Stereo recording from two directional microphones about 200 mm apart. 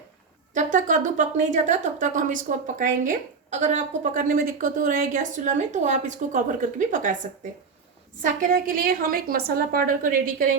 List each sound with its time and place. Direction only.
0.5 s speech: 40° right (ahead or behind)
8.2 s a woman's voice: 40° right (ahead or behind)